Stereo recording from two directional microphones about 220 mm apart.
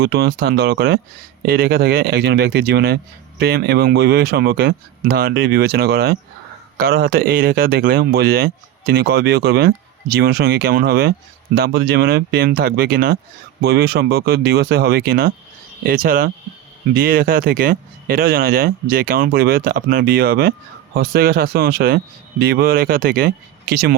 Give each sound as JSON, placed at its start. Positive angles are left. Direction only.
{"t": 0.0, "sound": "a man's voice", "side_deg": -45}